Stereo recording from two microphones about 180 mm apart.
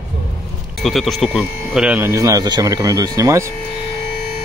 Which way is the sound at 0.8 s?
Centre (ahead or behind).